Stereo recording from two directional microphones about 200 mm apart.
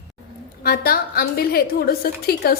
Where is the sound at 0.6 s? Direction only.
50° left (ahead or behind).